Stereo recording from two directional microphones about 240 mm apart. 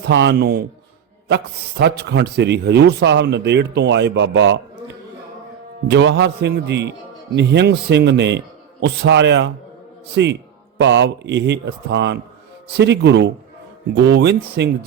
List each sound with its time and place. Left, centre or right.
0.0 s a man's voice: right
5.9 s a man's voice: right